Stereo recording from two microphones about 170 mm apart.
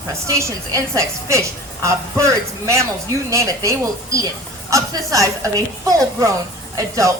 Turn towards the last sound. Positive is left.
turn(degrees=-20)  # may be behind; listen again after turning